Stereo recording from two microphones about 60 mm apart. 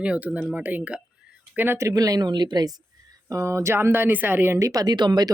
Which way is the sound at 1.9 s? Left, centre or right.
Right.